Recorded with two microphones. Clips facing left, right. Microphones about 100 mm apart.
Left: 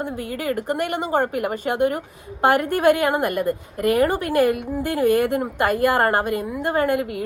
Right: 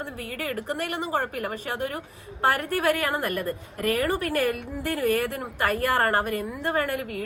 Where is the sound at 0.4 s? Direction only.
25° left (ahead or behind).